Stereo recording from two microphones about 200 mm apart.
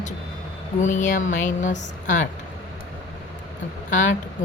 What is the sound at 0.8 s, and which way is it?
A woman's voice, 40° left (ahead or behind).